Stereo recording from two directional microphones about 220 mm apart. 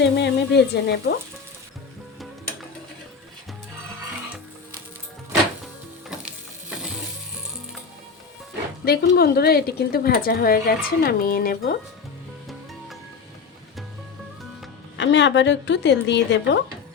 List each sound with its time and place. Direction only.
0.0 s speech: 50° left (ahead or behind)
6.1 s music: 5° right (ahead or behind)
8.8 s a woman's voice: 45° left (ahead or behind)
14.9 s a woman's voice: 55° left (ahead or behind)